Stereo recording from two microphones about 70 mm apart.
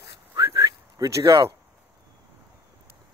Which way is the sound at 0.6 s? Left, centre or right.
Right.